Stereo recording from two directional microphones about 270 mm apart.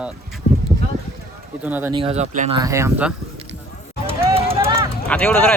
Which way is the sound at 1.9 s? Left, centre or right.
Right.